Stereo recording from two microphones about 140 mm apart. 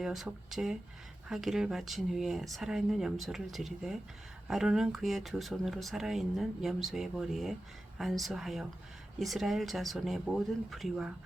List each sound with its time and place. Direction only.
0.0 s speech: 5° right (ahead or behind)